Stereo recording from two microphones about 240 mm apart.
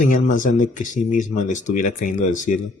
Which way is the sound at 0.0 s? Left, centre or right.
Left.